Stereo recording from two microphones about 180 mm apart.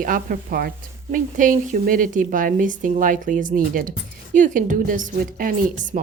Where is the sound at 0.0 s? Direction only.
50° right (ahead or behind).